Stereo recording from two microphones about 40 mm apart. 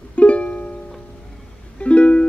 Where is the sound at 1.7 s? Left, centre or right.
Left.